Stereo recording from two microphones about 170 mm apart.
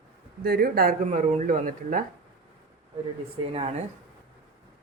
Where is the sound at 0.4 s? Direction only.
60° right (ahead or behind).